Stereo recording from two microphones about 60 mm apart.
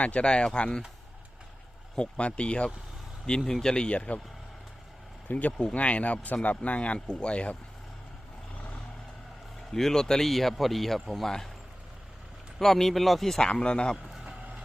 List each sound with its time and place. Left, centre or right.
0.0 s speech: centre
2.0 s speech: centre
5.3 s speech: left
9.7 s speech: centre
12.5 s speech: centre
13.4 s speech: centre